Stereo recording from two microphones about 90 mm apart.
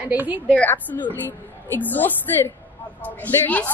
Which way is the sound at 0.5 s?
20° left (ahead or behind).